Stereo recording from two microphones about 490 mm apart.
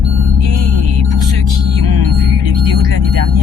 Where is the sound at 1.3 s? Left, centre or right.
Right.